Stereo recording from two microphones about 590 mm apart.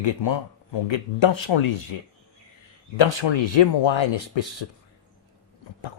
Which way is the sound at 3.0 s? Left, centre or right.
Left.